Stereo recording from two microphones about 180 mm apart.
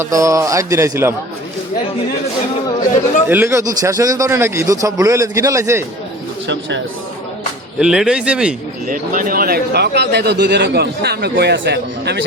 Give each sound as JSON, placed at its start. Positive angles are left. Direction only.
{"t": 0.0, "sound": "speech", "side_deg": -15}
{"t": 3.2, "sound": "speech", "side_deg": -15}
{"t": 6.5, "sound": "speech", "side_deg": -80}
{"t": 7.8, "sound": "speech", "side_deg": -5}
{"t": 8.9, "sound": "speech", "side_deg": -50}